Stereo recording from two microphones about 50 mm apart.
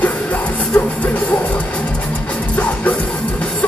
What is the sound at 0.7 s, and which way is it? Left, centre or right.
Music, left.